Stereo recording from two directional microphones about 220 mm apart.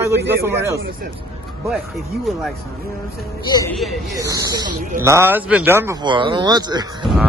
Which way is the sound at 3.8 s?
Centre (ahead or behind).